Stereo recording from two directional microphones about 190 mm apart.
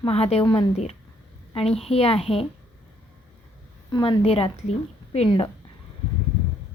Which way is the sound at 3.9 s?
25° left (ahead or behind).